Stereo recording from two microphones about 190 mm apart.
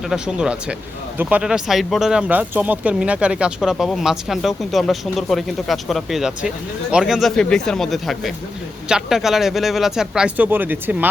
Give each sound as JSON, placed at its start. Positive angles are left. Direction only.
{"t": 0.1, "sound": "speech", "side_deg": -5}